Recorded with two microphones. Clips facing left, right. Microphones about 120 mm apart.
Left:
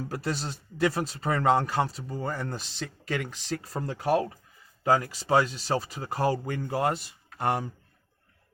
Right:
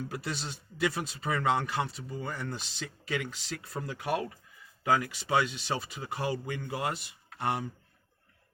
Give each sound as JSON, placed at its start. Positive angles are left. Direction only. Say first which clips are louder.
{"t": 0.0, "sound": "speech", "louder": "left 5 dB", "side_deg": 40}